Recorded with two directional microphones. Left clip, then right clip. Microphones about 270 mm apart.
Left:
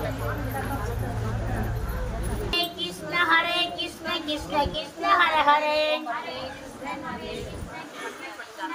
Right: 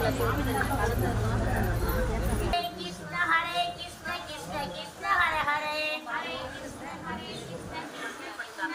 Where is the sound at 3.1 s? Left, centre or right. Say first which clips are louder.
Left 5 dB; left.